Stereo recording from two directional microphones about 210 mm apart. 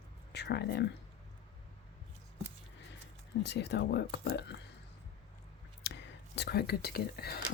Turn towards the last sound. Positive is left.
turn(degrees=50)  # may be behind; listen again after turning